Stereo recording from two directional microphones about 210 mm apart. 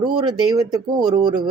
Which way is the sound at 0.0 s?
20° right (ahead or behind).